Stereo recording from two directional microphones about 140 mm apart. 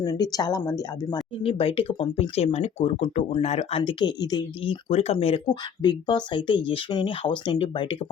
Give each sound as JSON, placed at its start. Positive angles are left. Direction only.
{"t": 0.0, "sound": "speech", "side_deg": 25}
{"t": 1.4, "sound": "speech", "side_deg": 40}
{"t": 5.8, "sound": "speech", "side_deg": 30}